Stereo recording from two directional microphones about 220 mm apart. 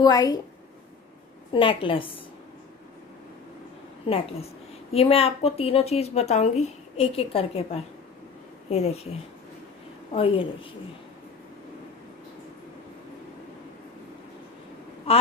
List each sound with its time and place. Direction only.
0.0 s a woman's voice: 20° left (ahead or behind)
1.5 s a woman's voice: 25° left (ahead or behind)
4.9 s a woman's voice: 25° left (ahead or behind)
10.1 s a woman's voice: 25° left (ahead or behind)
15.1 s a woman's voice: 25° left (ahead or behind)